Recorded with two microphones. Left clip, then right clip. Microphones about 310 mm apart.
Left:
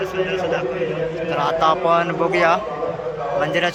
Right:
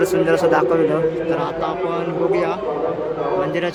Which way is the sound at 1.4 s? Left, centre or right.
Centre.